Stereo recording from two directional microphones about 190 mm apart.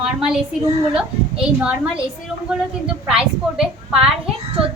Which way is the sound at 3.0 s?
5° right (ahead or behind).